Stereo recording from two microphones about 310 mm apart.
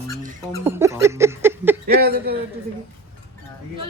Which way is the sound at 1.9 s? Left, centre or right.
Right.